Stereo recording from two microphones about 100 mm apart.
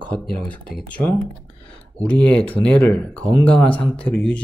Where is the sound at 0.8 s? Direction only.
15° left (ahead or behind).